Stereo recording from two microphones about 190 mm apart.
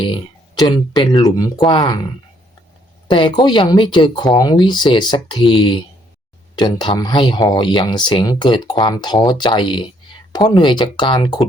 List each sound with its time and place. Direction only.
0.0 s speech: 25° left (ahead or behind)